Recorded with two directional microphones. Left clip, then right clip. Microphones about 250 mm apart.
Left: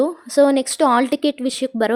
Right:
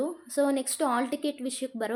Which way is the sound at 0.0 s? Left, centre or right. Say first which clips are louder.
Left 12 dB; left.